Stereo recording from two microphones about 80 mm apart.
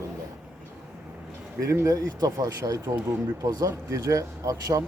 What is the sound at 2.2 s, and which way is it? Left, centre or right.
Speech, right.